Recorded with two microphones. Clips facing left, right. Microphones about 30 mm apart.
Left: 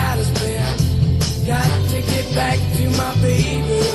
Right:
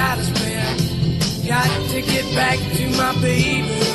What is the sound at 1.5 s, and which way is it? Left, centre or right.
Music, right.